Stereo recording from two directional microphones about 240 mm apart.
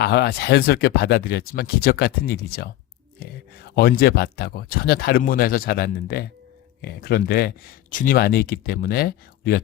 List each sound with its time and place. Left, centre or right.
0.0 s speech: left